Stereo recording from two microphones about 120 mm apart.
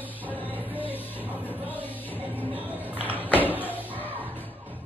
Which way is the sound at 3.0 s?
15° left (ahead or behind).